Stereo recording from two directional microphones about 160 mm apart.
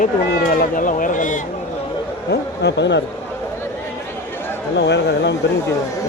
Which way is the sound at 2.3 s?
90° left.